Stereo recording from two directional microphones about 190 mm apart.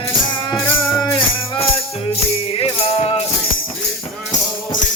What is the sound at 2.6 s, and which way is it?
Music, 30° left (ahead or behind).